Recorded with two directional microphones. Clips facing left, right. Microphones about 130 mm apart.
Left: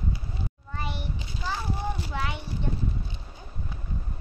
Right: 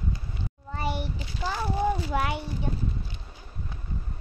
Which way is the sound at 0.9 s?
50° right (ahead or behind).